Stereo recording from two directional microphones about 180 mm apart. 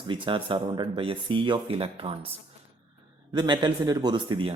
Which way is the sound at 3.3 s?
25° right (ahead or behind).